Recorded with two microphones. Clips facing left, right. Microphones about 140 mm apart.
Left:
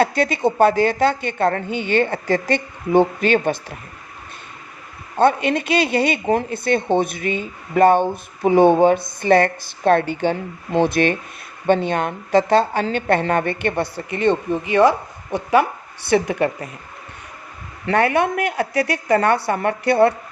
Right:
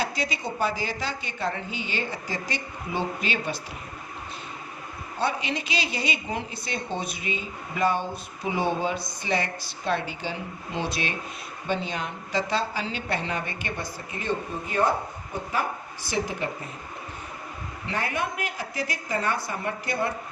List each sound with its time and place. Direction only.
0.0 s a woman's voice: 55° left (ahead or behind)
5.1 s a woman's voice: 55° left (ahead or behind); by 15.6 s 80° left
16.0 s a woman's voice: 65° left (ahead or behind)
17.8 s a woman's voice: 70° left (ahead or behind)